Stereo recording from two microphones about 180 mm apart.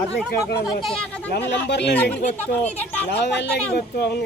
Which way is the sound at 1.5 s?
70° left (ahead or behind).